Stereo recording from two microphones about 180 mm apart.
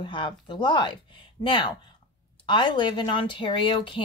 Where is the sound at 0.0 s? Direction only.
25° left (ahead or behind).